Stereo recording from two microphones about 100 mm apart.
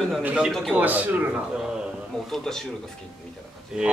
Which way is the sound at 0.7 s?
15° right (ahead or behind).